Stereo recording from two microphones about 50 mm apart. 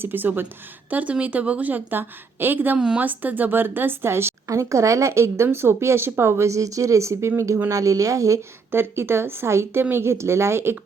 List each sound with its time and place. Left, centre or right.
0.0 s a woman's voice: right
0.9 s a woman's voice: right
2.7 s speech: centre
3.0 s speech: right
8.7 s a woman's voice: right